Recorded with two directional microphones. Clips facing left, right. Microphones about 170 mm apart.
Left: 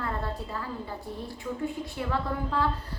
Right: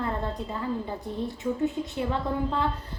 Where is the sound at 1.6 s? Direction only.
20° right (ahead or behind).